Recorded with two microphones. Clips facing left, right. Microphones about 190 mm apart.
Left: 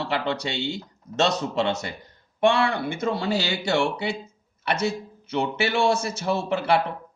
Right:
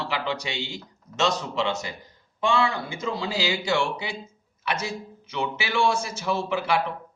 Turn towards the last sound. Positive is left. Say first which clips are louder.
# left 3 dB
turn(degrees=60)  # may be behind; listen again after turning